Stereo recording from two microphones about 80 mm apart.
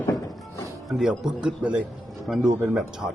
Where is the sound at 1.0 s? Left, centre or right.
Centre.